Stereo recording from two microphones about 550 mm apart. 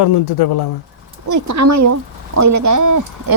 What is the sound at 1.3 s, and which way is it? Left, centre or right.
Speech, right.